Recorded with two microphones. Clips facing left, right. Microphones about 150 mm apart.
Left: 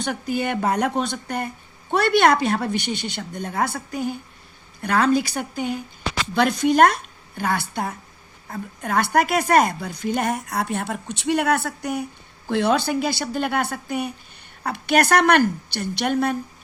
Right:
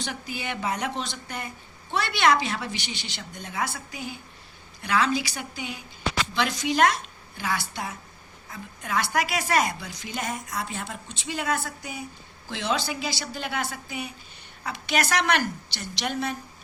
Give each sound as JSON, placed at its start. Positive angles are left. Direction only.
{"t": 0.0, "sound": "a woman's voice", "side_deg": 50}